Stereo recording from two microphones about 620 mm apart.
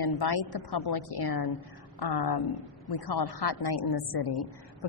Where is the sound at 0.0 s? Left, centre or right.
Left.